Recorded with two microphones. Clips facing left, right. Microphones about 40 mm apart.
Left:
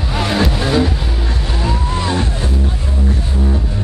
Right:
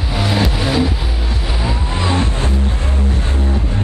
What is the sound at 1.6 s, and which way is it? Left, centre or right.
Music, centre.